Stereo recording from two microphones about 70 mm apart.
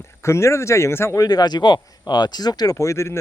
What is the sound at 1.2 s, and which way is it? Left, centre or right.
Speech, left.